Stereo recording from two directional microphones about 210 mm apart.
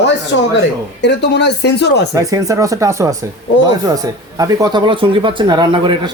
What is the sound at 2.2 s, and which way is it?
Speech, 15° right (ahead or behind).